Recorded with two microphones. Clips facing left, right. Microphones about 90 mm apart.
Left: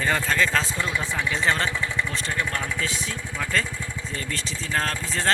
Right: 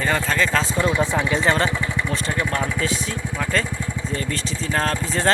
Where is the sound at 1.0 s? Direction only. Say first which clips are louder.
Right 5 dB; 20° right (ahead or behind).